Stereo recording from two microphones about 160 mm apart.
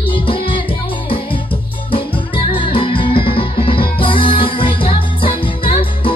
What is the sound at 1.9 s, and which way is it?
Music, 35° left (ahead or behind).